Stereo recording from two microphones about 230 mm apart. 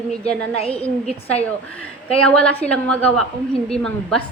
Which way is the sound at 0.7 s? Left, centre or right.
Centre.